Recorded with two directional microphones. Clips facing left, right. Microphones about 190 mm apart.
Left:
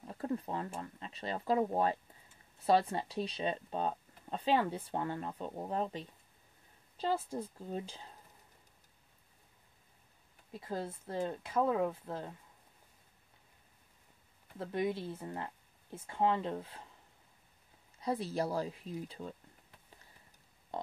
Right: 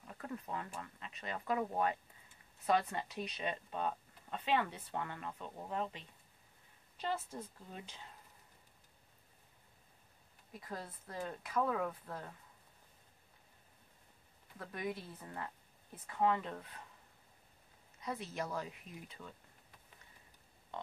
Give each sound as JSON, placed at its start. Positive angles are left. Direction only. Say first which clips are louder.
{"t": 0.0, "sound": "speech", "louder": "left 8 dB", "side_deg": 30}
{"t": 10.5, "sound": "speech", "louder": "left 7 dB", "side_deg": 25}
{"t": 14.6, "sound": "speech", "louder": "left 7 dB", "side_deg": 25}
{"t": 18.0, "sound": "speech", "louder": "left 7 dB", "side_deg": 35}
{"t": 20.7, "sound": "pig", "louder": "left 5 dB", "side_deg": 35}